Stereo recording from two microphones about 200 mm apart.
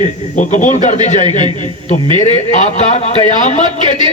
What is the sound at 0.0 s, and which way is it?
A man's voice, 40° left (ahead or behind).